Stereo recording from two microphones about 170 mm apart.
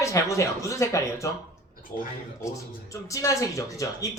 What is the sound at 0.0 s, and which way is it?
A woman's voice, 20° left (ahead or behind).